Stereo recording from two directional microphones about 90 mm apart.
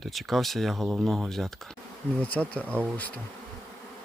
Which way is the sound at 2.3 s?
15° left (ahead or behind).